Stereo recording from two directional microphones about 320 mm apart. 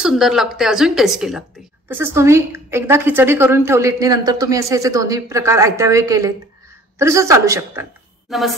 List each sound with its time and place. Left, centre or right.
0.0 s a woman's voice: centre